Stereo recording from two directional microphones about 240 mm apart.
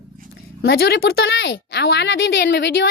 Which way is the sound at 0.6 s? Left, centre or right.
Left.